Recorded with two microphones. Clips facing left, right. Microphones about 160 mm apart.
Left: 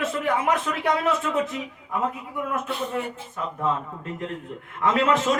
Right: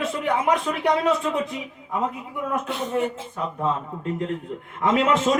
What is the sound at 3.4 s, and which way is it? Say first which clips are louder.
Speech: right 2 dB; 25° right (ahead or behind).